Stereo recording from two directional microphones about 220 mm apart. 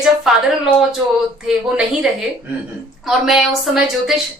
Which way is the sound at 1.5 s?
5° right (ahead or behind).